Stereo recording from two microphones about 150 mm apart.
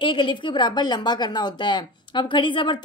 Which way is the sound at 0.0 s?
35° left (ahead or behind).